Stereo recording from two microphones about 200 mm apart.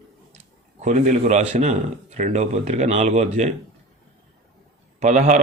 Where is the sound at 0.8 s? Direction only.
35° right (ahead or behind).